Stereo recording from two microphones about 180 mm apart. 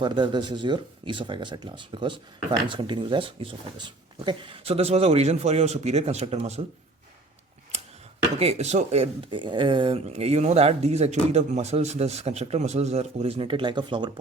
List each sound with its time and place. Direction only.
0.0 s speech: 25° right (ahead or behind)
8.4 s speech: 35° right (ahead or behind)